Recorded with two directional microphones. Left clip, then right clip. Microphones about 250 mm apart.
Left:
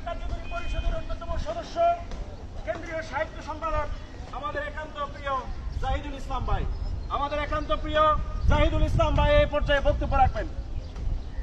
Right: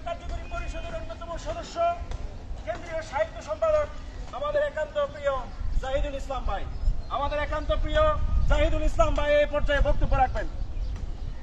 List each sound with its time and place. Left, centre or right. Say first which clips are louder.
1.3 s vehicle: left 2 dB; right
2.6 s a sound: left 1 dB; right
7.1 s a man's voice: even; centre